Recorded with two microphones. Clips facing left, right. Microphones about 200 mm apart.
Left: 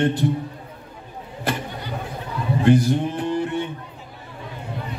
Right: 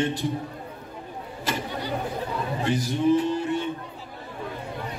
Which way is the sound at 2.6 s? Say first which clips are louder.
Left 6 dB; 55° left (ahead or behind).